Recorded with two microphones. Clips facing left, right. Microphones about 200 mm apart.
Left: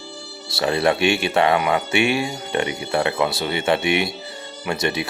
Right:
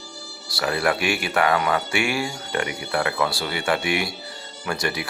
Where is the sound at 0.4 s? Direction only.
25° left (ahead or behind).